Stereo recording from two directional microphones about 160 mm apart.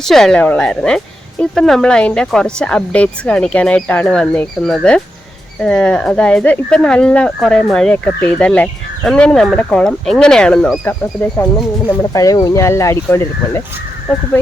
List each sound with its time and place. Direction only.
0.0 s speech: centre (ahead or behind)
11.9 s speech: 20° left (ahead or behind)